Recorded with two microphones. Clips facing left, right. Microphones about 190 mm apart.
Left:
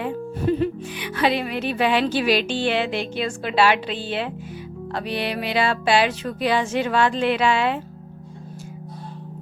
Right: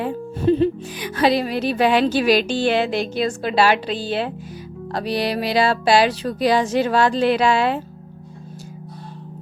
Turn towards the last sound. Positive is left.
turn(degrees=-40)  # may be behind; listen again after turning